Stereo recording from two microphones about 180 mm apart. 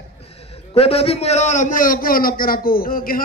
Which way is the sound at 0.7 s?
35° left (ahead or behind).